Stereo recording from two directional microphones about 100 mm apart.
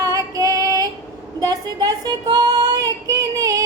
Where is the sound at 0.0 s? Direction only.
40° right (ahead or behind).